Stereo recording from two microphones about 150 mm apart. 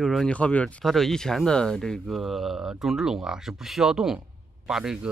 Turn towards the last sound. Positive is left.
turn(degrees=-5)  # may be behind; listen again after turning